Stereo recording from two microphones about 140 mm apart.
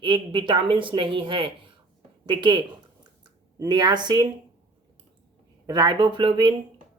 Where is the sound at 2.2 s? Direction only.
35° right (ahead or behind).